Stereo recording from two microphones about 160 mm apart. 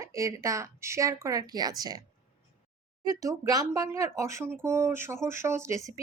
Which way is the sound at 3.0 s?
20° right (ahead or behind).